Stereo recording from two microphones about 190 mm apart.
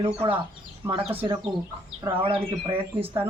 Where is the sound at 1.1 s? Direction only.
30° right (ahead or behind).